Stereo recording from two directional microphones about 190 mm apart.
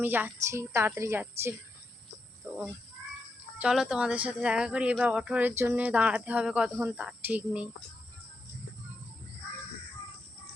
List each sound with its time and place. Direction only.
0.0 s speech: 10° right (ahead or behind)
2.4 s wild animals: 15° right (ahead or behind)
3.6 s speech: 5° right (ahead or behind)